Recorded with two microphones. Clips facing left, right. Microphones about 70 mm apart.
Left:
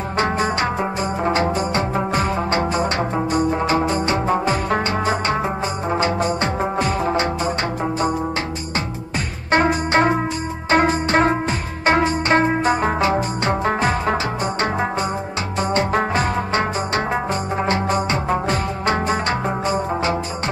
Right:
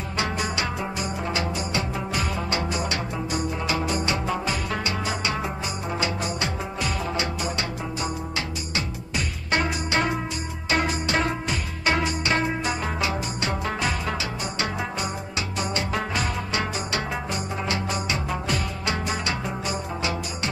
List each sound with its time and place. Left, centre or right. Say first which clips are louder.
0.2 s music: left 7 dB; left
9.5 s music: left 8 dB; left
15.7 s music: left 10 dB; left